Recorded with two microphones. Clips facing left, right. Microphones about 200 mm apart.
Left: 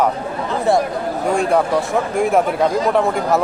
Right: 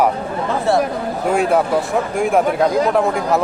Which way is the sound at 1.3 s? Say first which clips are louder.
Right 1 dB; 5° right (ahead or behind).